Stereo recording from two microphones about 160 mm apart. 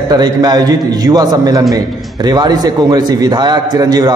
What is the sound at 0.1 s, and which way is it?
A man's voice, 25° right (ahead or behind).